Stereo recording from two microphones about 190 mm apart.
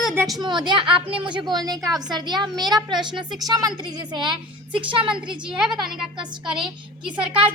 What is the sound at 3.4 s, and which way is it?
A woman's voice, 20° right (ahead or behind).